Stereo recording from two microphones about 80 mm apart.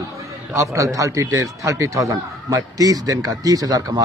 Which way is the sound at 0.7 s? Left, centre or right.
Right.